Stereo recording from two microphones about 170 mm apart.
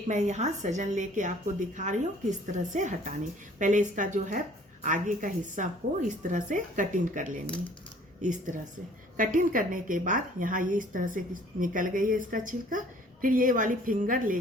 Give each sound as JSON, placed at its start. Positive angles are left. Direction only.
{"t": 0.1, "sound": "a woman's voice", "side_deg": -45}